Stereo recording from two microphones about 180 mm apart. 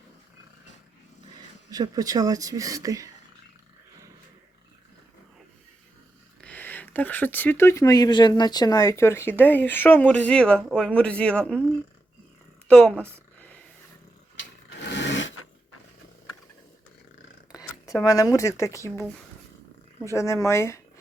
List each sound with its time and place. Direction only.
1.7 s speech: 20° right (ahead or behind)
6.4 s speech: 10° left (ahead or behind)
12.6 s a woman's voice: 5° left (ahead or behind)
14.8 s a sound: 85° left
17.5 s speech: 20° left (ahead or behind)
20.1 s speech: 15° left (ahead or behind)